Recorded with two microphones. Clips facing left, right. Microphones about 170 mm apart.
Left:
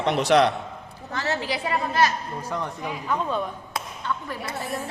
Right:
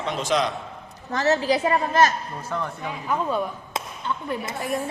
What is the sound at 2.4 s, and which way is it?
Speech, 15° left (ahead or behind).